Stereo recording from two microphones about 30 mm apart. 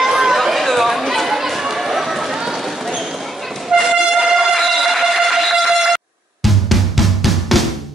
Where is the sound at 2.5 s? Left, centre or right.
Centre.